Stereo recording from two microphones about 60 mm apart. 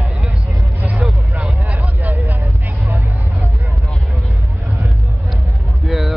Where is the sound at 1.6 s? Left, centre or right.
Right.